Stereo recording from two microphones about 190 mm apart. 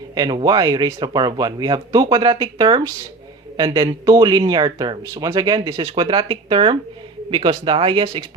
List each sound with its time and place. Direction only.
0.1 s speech: 20° right (ahead or behind)